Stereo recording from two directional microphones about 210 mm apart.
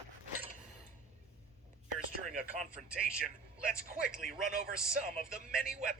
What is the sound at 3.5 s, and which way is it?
Speech, 5° right (ahead or behind).